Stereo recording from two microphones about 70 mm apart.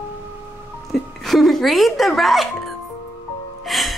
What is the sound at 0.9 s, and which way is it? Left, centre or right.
Speech, centre.